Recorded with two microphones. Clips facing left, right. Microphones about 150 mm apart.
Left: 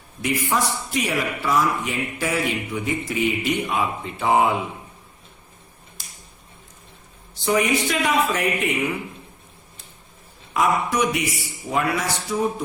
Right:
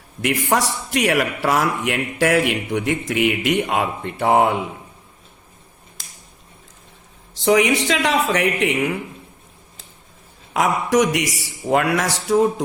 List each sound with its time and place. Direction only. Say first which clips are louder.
0.2 s a man's voice: right 3 dB; 75° right (ahead or behind)
7.3 s speech: right 4 dB; 90° right; by 9.0 s 70° right (ahead or behind)
10.5 s speech: right 3 dB; 80° right